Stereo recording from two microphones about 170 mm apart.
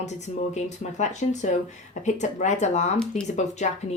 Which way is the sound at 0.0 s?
45° left (ahead or behind).